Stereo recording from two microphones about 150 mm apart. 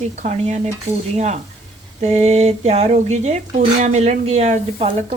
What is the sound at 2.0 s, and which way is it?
Speech, 50° right (ahead or behind).